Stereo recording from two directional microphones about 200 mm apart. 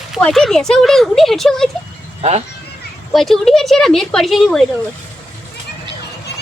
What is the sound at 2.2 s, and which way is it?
Speech, 30° right (ahead or behind).